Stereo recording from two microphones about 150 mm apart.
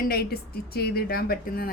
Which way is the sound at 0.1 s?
90° left.